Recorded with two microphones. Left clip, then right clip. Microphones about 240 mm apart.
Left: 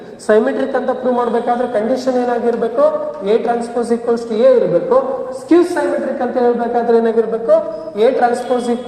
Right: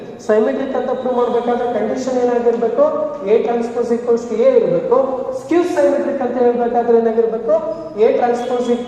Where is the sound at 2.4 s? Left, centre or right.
Left.